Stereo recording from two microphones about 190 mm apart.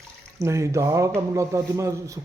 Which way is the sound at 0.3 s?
15° right (ahead or behind).